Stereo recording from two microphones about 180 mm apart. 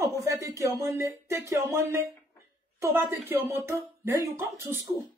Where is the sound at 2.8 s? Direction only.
15° right (ahead or behind).